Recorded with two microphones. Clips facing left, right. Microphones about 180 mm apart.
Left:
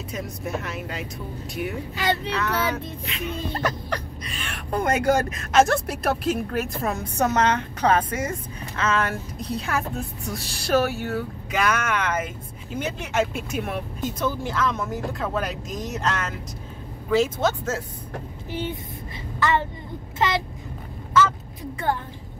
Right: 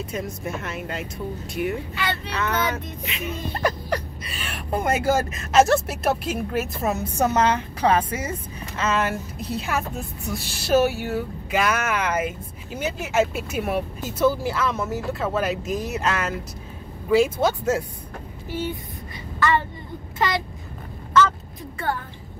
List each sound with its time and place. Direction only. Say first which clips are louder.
0.1 s speech: right 1 dB; centre (ahead or behind)
18.5 s speech: right 1 dB; 20° left (ahead or behind)
20.2 s a child's voice: even; 20° left (ahead or behind)